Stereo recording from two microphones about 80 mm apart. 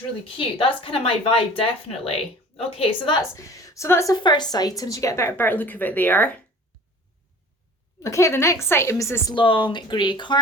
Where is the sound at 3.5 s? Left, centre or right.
Left.